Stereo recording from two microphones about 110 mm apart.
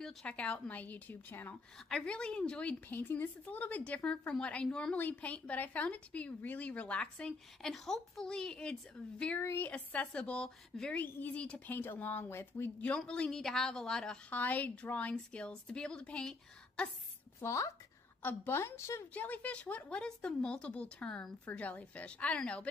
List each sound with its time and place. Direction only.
0.0 s a woman's voice: 10° left (ahead or behind)
9.4 s a woman's voice: 20° left (ahead or behind)
12.9 s a woman's voice: 10° left (ahead or behind)
17.4 s a woman's voice: 25° left (ahead or behind)
19.1 s a woman's voice: 15° left (ahead or behind)